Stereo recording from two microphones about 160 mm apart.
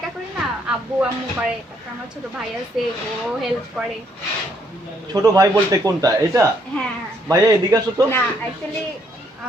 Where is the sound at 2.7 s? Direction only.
Centre (ahead or behind).